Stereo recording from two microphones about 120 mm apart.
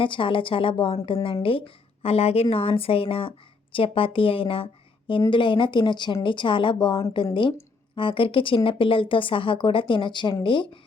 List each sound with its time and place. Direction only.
0.0 s speech: 45° left (ahead or behind)